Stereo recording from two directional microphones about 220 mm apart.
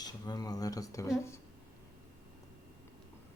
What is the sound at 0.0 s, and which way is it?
Speech, 15° left (ahead or behind).